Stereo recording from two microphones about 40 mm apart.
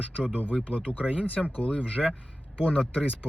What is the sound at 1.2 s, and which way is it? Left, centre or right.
Speech, left.